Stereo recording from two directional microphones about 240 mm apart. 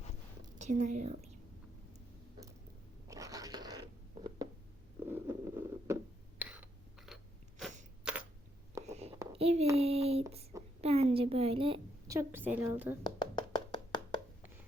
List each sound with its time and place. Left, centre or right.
0.6 s a woman's voice: right
3.1 s a sound: centre
8.9 s whispering: right
9.3 s a sound: right
9.7 s child singing: right
10.8 s a woman's voice: right; by 13.0 s centre
13.0 s hands: centre